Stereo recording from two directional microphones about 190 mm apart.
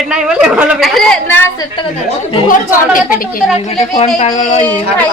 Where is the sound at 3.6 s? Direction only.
35° left (ahead or behind).